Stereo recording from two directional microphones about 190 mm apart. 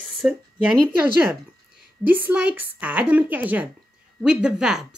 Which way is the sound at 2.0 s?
10° right (ahead or behind).